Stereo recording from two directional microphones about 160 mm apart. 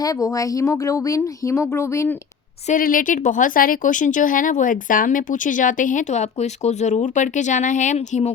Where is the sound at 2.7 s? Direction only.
60° left (ahead or behind).